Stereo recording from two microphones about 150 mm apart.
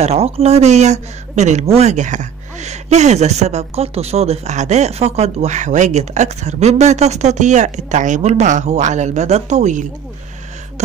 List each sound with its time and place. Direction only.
0.0 s speech: 45° right (ahead or behind)